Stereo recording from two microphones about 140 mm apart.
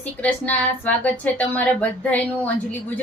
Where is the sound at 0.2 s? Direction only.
10° left (ahead or behind).